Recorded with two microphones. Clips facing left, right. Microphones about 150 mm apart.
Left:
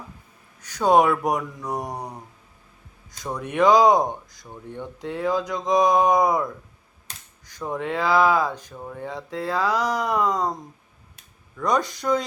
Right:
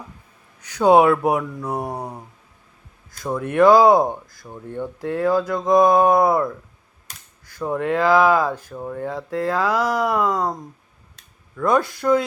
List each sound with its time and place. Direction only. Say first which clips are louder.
0.8 s speech: right 4 dB; 10° right (ahead or behind)
2.0 s a sound: right 3 dB; 25° right (ahead or behind)
3.5 s speech: right 4 dB; 5° right (ahead or behind)
7.5 s speech: right 5 dB; 5° right (ahead or behind)
11.6 s speech: right 4 dB; 5° right (ahead or behind)